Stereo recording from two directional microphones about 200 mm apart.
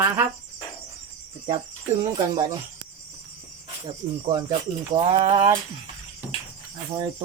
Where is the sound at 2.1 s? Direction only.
20° right (ahead or behind).